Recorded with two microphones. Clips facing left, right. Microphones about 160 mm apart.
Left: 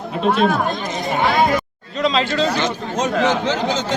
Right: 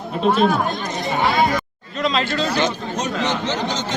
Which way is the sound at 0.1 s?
Centre (ahead or behind).